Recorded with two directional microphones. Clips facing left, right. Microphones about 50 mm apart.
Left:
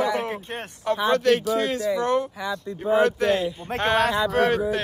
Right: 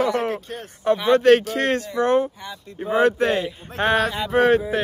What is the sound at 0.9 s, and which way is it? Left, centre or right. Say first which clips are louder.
Speech: right 5 dB; right.